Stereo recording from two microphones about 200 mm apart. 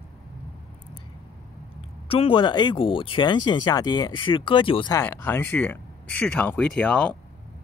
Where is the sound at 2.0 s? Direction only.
25° left (ahead or behind); by 7.1 s 5° left (ahead or behind).